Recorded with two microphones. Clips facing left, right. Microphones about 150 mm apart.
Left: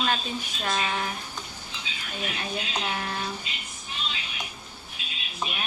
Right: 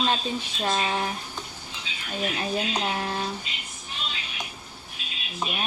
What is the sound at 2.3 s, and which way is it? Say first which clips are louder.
Speech: right 5 dB; 35° right (ahead or behind).